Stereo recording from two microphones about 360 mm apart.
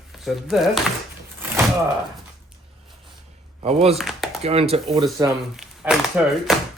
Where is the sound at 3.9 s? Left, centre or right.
Centre.